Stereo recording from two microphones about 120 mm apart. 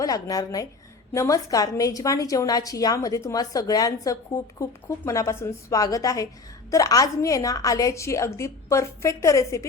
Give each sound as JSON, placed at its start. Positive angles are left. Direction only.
{"t": 0.0, "sound": "a woman's voice", "side_deg": 30}